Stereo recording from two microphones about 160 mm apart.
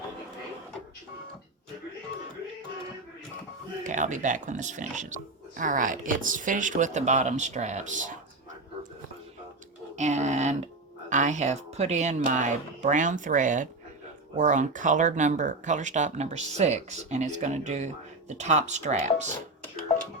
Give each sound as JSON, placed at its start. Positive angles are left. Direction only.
{"t": 3.8, "sound": "speech", "side_deg": -50}
{"t": 9.9, "sound": "speech", "side_deg": -45}